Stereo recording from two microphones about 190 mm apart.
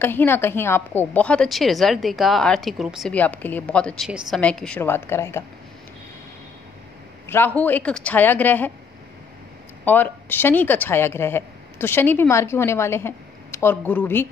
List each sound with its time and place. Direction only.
0.0 s a woman's voice: 10° left (ahead or behind)
7.2 s a woman's voice: 10° left (ahead or behind)
9.8 s a woman's voice: 10° left (ahead or behind)